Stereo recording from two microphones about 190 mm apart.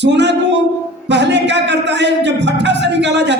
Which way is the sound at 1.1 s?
65° right (ahead or behind).